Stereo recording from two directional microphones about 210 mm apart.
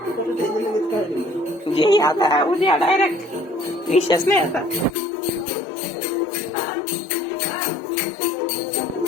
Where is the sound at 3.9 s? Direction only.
20° left (ahead or behind).